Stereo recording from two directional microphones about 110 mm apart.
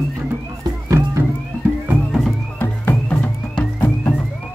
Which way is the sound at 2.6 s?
15° left (ahead or behind).